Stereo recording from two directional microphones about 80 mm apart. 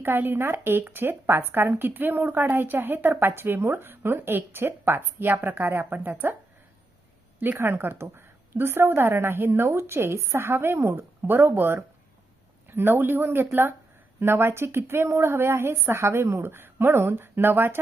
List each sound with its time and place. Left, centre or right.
0.0 s speech: right
7.3 s speech: right